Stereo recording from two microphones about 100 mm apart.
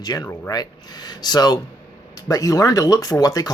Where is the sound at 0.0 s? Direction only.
45° left (ahead or behind).